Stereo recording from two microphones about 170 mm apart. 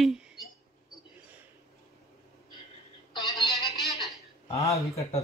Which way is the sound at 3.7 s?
Centre (ahead or behind).